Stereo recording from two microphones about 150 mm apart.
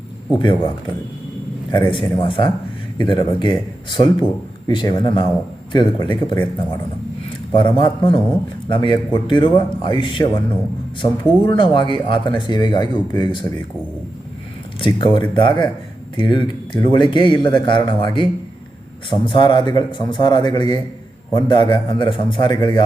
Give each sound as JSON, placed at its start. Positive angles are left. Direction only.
{"t": 1.7, "sound": "a man's voice", "side_deg": 35}
{"t": 7.5, "sound": "speech", "side_deg": 30}
{"t": 14.8, "sound": "a man's voice", "side_deg": 30}